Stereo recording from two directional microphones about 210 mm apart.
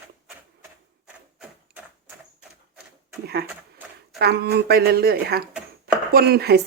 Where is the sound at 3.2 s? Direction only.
45° right (ahead or behind).